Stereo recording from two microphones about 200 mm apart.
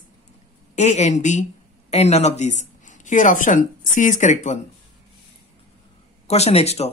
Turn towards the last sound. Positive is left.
turn(degrees=30)  # may be behind; listen again after turning